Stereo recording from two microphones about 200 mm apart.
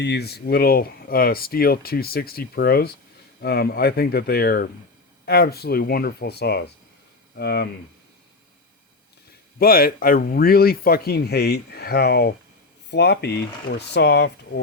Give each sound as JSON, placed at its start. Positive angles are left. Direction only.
{"t": 0.0, "sound": "speech", "side_deg": 55}
{"t": 9.6, "sound": "speech", "side_deg": 45}